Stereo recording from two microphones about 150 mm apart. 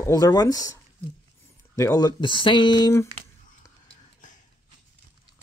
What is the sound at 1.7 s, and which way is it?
Speech, 20° left (ahead or behind).